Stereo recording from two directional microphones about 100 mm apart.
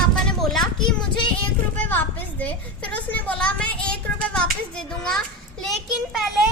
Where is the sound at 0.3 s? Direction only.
5° left (ahead or behind).